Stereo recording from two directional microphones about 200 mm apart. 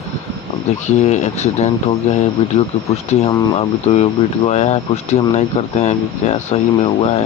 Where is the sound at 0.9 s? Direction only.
35° left (ahead or behind).